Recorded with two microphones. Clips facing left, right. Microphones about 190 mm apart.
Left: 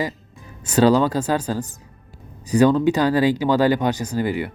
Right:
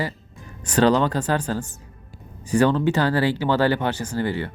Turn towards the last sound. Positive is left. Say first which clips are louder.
# left 2 dB
turn(degrees=15)  # may be behind; listen again after turning